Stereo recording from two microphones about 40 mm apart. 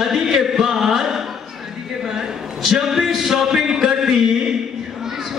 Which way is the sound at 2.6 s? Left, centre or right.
Centre.